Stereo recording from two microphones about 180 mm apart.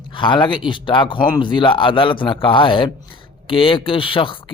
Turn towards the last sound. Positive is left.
turn(degrees=30)  # may be behind; listen again after turning